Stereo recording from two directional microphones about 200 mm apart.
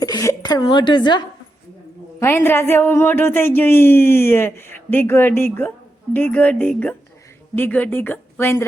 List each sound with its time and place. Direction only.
0.0 s a woman's voice: 15° left (ahead or behind)
2.1 s a woman's voice: 10° left (ahead or behind)